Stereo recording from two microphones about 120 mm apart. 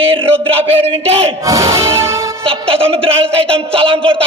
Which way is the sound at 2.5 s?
50° right (ahead or behind).